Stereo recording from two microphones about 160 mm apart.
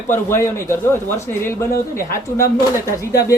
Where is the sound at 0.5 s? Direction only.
15° left (ahead or behind).